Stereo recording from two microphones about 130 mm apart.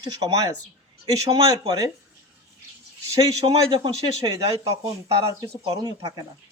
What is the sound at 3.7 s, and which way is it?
Speech, 35° right (ahead or behind).